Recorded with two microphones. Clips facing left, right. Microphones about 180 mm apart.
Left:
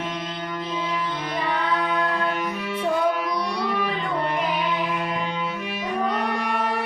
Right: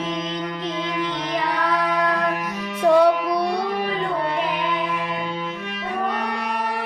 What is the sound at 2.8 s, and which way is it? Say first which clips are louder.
Music: right 8 dB; 80° right.